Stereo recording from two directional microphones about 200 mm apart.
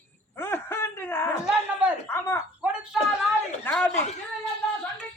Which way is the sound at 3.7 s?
5° left (ahead or behind).